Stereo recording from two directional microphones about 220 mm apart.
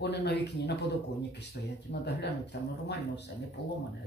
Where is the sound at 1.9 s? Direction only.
50° left (ahead or behind).